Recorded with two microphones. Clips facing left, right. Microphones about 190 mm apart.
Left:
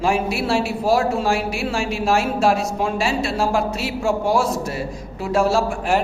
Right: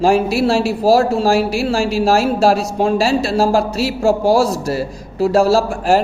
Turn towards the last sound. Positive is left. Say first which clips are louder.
# right 5 dB
turn(degrees=-35)  # may be behind; listen again after turning